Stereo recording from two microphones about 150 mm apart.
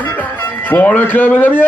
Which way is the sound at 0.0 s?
10° left (ahead or behind).